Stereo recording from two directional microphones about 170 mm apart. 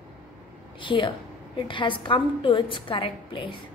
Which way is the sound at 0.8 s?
30° left (ahead or behind).